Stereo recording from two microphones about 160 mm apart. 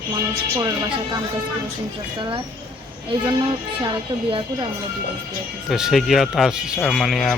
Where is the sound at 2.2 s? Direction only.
30° right (ahead or behind).